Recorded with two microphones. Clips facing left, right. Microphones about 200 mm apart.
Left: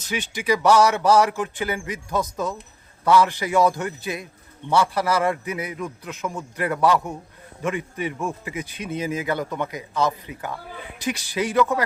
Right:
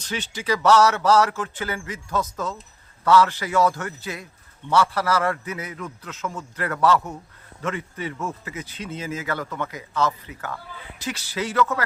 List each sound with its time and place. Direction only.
0.0 s speech: 10° left (ahead or behind)